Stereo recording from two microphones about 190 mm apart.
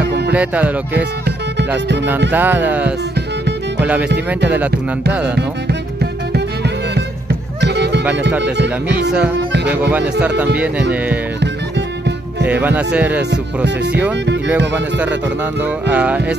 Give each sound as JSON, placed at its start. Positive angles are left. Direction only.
{"t": 0.3, "sound": "music", "side_deg": -10}
{"t": 2.3, "sound": "music", "side_deg": -10}
{"t": 4.5, "sound": "music", "side_deg": -10}
{"t": 7.6, "sound": "music", "side_deg": -60}
{"t": 8.4, "sound": "speech", "side_deg": -65}
{"t": 9.7, "sound": "music", "side_deg": -10}
{"t": 12.4, "sound": "music", "side_deg": -10}
{"t": 15.6, "sound": "music", "side_deg": -5}